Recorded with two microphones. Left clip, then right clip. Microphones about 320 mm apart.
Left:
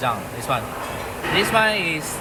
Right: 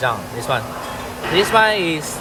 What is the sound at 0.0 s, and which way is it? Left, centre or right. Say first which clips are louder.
Speech: right 3 dB; right.